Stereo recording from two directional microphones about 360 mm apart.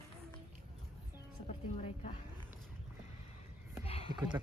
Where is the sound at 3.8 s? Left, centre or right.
Centre.